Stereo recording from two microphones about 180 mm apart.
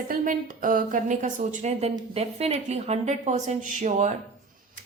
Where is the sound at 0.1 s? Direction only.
50° right (ahead or behind).